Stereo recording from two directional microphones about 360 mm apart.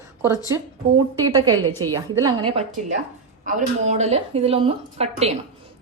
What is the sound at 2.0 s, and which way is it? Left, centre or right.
A woman's voice, centre.